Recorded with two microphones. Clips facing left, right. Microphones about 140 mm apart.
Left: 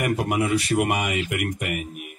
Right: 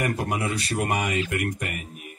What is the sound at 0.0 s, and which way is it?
Speech, 15° left (ahead or behind).